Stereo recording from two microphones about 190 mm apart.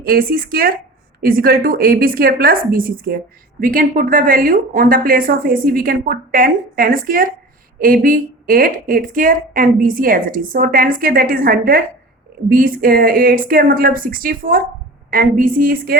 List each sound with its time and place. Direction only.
0.0 s a woman's voice: 50° right (ahead or behind)